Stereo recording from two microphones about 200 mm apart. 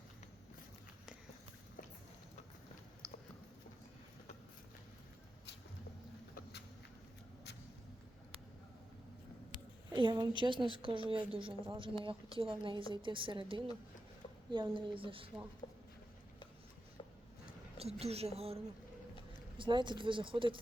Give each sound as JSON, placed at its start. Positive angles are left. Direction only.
{"t": 9.9, "sound": "a woman's voice", "side_deg": -20}
{"t": 17.7, "sound": "a woman's voice", "side_deg": -30}